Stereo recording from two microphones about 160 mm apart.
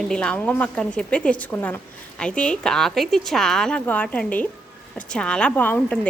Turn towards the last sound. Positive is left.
turn(degrees=10)  # may be behind; listen again after turning